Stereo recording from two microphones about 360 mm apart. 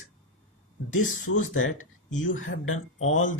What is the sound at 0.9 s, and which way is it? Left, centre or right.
Speech, left.